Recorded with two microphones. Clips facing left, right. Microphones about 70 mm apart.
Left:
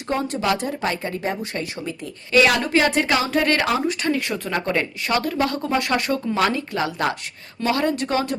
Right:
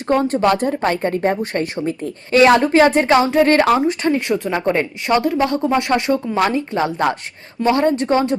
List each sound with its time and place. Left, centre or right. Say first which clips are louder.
0.1 s a woman's voice: right 7 dB; right